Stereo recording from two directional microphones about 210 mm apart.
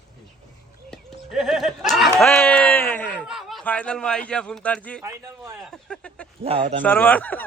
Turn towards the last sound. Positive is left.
turn(degrees=5)  # may be behind; listen again after turning